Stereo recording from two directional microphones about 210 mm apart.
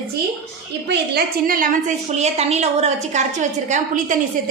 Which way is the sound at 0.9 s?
45° right (ahead or behind).